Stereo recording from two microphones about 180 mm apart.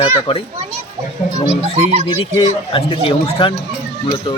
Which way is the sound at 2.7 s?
30° left (ahead or behind).